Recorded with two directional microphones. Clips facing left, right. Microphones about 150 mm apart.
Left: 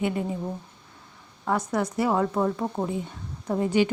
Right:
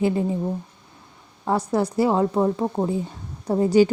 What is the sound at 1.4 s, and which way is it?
Speech, 30° right (ahead or behind).